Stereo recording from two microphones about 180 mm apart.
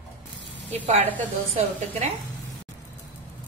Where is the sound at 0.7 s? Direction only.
35° right (ahead or behind).